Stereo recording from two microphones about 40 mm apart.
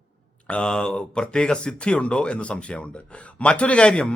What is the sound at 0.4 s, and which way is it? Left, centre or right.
A man's voice, left.